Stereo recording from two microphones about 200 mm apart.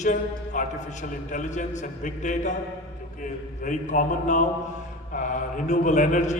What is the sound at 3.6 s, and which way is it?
A man's voice, 40° left (ahead or behind).